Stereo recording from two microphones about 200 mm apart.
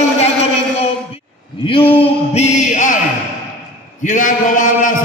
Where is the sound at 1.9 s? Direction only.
30° left (ahead or behind).